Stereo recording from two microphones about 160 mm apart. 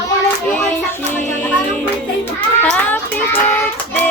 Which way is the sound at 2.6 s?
10° left (ahead or behind).